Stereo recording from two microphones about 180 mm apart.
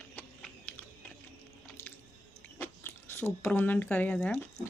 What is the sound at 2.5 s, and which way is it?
Speech, 10° left (ahead or behind).